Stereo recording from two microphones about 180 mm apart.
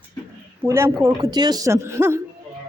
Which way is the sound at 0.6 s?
15° right (ahead or behind).